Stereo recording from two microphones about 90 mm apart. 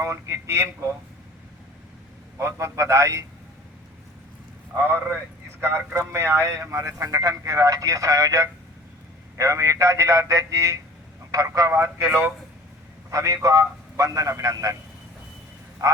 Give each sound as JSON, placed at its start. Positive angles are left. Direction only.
{"t": 0.0, "sound": "a man's voice", "side_deg": -30}
{"t": 2.4, "sound": "a man's voice", "side_deg": -35}
{"t": 5.5, "sound": "a man's voice", "side_deg": -25}
{"t": 15.8, "sound": "a man's voice", "side_deg": -45}